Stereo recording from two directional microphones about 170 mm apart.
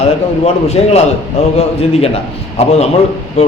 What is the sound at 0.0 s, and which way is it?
A man's voice, 35° left (ahead or behind).